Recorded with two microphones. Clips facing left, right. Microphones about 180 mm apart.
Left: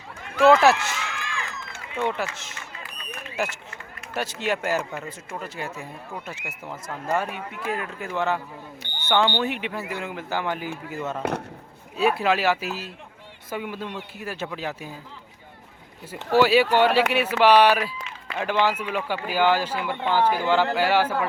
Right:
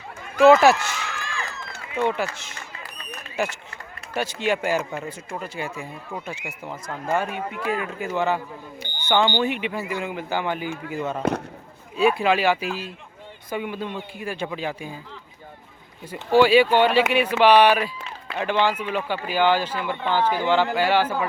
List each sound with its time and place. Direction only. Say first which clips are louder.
0.4 s speech: right 2 dB; 5° right (ahead or behind)
0.9 s crowd: right 1 dB; 40° right (ahead or behind)
2.0 s speech: right 3 dB; centre (ahead or behind)
16.3 s speech: right 2 dB; 5° left (ahead or behind)